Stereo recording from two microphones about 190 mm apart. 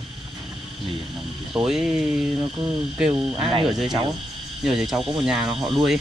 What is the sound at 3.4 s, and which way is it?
Speech, 30° right (ahead or behind).